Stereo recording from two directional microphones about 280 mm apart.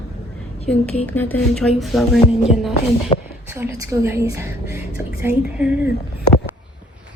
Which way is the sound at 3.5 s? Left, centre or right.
Centre.